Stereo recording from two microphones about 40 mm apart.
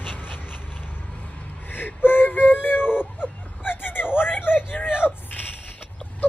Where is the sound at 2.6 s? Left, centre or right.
Left.